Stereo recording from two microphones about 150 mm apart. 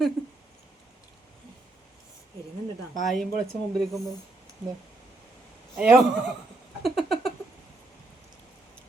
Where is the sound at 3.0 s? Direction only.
Centre (ahead or behind).